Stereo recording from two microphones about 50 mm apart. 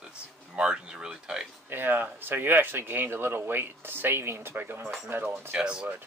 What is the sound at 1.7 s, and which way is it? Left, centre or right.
Speech, right.